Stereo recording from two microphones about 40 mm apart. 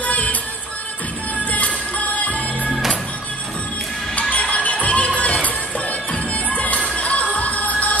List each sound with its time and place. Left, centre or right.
0.0 s music: left
1.4 s music: left
4.1 s music: left